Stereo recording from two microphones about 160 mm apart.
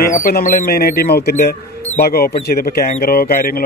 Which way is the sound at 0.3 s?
65° left (ahead or behind).